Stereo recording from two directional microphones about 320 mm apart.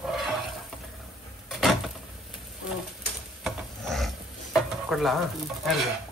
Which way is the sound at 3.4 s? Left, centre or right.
Centre.